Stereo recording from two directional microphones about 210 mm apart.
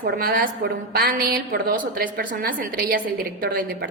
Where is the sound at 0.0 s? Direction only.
45° right (ahead or behind).